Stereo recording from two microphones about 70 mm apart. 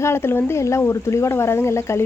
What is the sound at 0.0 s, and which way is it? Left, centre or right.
Speech, left.